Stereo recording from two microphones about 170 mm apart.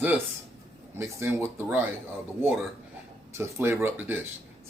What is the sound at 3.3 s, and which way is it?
Speech, 15° right (ahead or behind).